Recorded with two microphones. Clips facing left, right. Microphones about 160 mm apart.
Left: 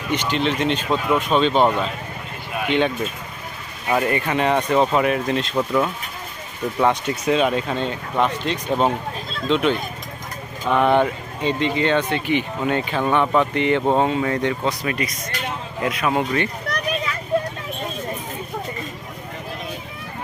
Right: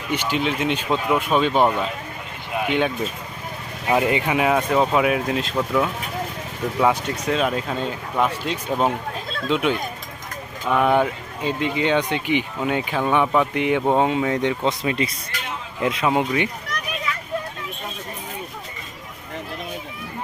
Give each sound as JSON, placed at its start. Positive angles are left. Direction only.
{"t": 0.1, "sound": "speech", "side_deg": -10}
{"t": 6.7, "sound": "speech", "side_deg": 0}